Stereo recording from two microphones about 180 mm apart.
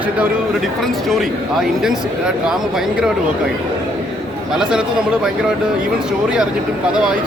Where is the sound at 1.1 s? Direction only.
Centre (ahead or behind).